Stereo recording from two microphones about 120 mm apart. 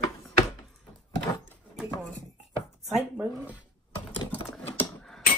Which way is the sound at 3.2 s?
20° right (ahead or behind).